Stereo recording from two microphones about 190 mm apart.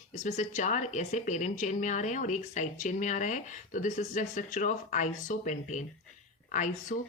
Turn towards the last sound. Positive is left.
turn(degrees=40)  # may be behind; listen again after turning